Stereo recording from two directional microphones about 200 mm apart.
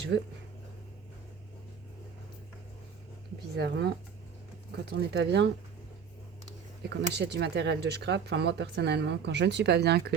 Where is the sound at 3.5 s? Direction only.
55° right (ahead or behind).